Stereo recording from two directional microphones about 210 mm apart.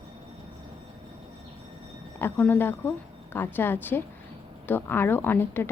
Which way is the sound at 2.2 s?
10° left (ahead or behind).